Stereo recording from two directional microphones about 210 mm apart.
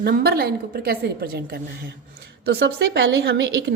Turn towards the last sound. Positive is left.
turn(degrees=-60)  # may be behind; listen again after turning